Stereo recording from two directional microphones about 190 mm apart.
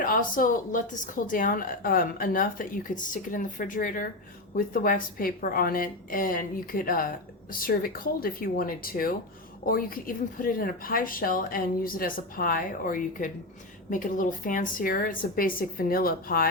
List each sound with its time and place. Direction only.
0.0 s speech: 45° left (ahead or behind)